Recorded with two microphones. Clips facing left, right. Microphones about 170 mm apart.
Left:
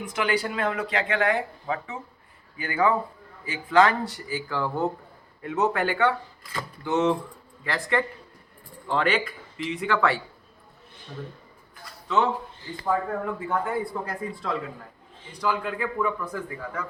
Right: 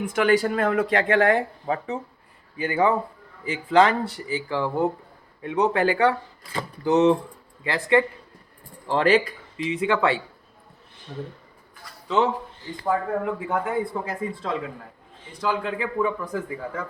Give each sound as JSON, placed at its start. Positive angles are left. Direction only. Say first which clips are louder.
{"t": 0.0, "sound": "speech", "louder": "right 6 dB", "side_deg": -50}
{"t": 2.6, "sound": "speech", "louder": "right 2 dB", "side_deg": -25}
{"t": 5.7, "sound": "speech", "louder": "right 4 dB", "side_deg": -35}
{"t": 8.9, "sound": "speech", "louder": "right 5 dB", "side_deg": -40}
{"t": 9.6, "sound": "speech", "louder": "right 2 dB", "side_deg": -20}
{"t": 12.8, "sound": "speech", "louder": "right 2 dB", "side_deg": -15}